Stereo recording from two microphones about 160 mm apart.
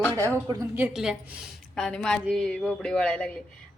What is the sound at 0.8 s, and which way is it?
Speech, 5° right (ahead or behind).